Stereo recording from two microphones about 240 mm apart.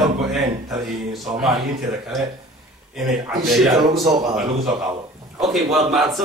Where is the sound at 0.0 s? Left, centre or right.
Centre.